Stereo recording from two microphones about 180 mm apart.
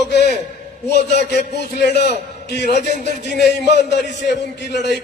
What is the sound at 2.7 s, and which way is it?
Speech, 45° right (ahead or behind).